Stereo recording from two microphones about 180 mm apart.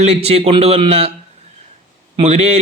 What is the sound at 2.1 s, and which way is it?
Speech, 35° right (ahead or behind).